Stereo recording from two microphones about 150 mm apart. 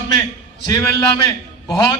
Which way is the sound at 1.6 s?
30° left (ahead or behind).